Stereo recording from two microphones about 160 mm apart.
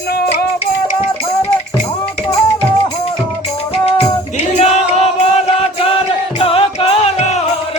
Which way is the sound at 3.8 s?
40° left (ahead or behind).